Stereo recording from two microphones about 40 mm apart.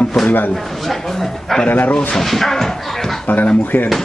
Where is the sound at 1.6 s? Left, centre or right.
Left.